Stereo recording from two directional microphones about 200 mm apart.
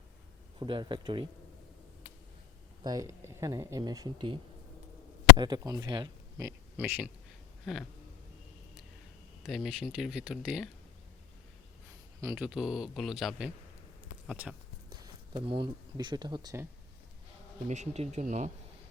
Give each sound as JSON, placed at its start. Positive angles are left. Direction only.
{"t": 0.6, "sound": "speech", "side_deg": -25}
{"t": 2.8, "sound": "speech", "side_deg": -20}
{"t": 5.4, "sound": "a man's voice", "side_deg": -20}
{"t": 7.6, "sound": "a sound", "side_deg": 0}
{"t": 9.4, "sound": "speech", "side_deg": 0}
{"t": 12.2, "sound": "speech", "side_deg": -5}
{"t": 15.0, "sound": "speech", "side_deg": -20}
{"t": 17.7, "sound": "speech", "side_deg": -35}